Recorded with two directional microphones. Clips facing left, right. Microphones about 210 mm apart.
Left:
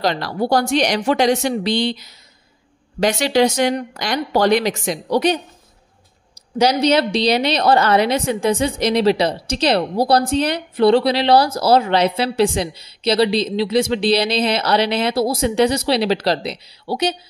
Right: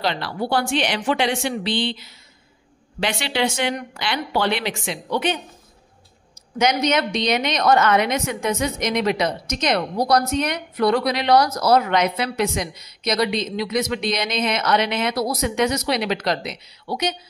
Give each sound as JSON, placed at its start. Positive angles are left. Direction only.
{"t": 0.0, "sound": "a woman's voice", "side_deg": 40}
{"t": 6.6, "sound": "a woman's voice", "side_deg": 35}